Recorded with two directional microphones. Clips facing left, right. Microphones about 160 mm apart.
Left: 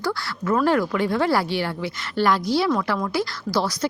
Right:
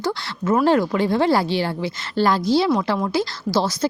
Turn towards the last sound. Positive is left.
turn(degrees=-25)  # may be behind; listen again after turning